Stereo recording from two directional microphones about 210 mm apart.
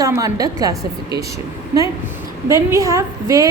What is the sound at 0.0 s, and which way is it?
A woman's voice, 15° right (ahead or behind).